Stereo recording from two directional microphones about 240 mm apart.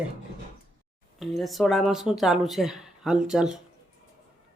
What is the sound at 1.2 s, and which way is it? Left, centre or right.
Speech, centre.